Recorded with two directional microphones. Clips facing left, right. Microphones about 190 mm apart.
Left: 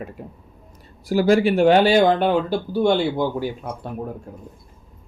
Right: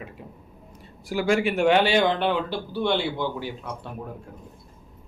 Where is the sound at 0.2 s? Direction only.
45° left (ahead or behind).